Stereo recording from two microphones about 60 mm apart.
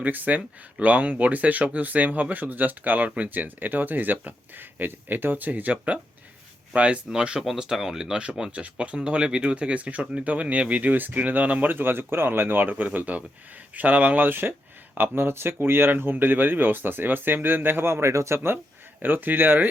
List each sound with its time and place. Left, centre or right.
0.0 s speech: right
19.0 s speech: right